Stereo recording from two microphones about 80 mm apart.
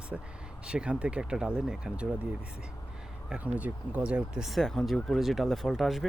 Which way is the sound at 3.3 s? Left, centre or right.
Centre.